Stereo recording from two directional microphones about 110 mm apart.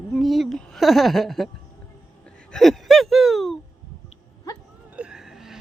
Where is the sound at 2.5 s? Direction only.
5° left (ahead or behind).